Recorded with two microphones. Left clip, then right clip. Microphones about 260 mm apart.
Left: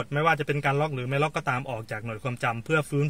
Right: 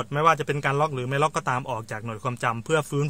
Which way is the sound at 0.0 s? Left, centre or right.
Centre.